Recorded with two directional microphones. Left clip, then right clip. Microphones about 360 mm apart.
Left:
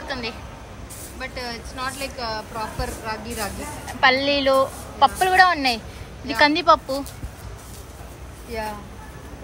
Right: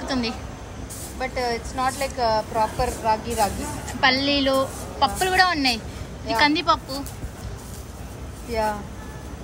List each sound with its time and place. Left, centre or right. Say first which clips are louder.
0.1 s a woman's voice: right 2 dB; centre
1.2 s a woman's voice: right 6 dB; centre
4.0 s a woman's voice: left 2 dB; centre